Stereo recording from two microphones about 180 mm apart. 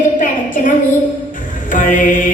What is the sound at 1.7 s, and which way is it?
Mantra, 45° left (ahead or behind).